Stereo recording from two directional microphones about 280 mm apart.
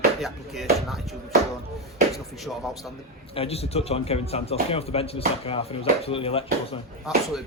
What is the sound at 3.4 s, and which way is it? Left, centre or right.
Speech, left.